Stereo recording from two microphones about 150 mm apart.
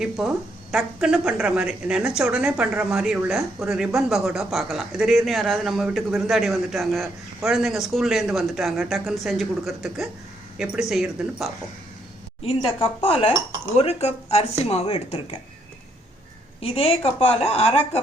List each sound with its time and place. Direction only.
0.2 s a woman's voice: 5° right (ahead or behind)
12.4 s a woman's voice: 40° left (ahead or behind)
16.6 s a woman's voice: 40° left (ahead or behind)